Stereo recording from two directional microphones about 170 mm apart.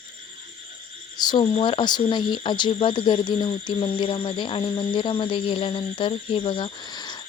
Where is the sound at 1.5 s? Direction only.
30° left (ahead or behind).